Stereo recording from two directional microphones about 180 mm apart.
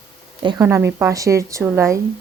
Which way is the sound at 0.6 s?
15° right (ahead or behind).